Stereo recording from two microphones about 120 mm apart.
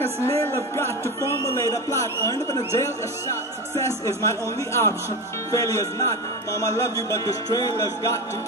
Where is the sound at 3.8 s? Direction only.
25° left (ahead or behind).